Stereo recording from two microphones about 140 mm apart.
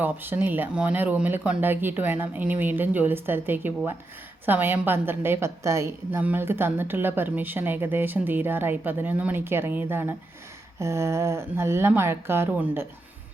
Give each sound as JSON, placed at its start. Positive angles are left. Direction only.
{"t": 0.0, "sound": "a woman's voice", "side_deg": -15}